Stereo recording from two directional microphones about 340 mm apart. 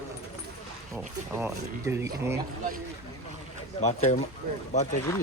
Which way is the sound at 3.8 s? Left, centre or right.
Centre.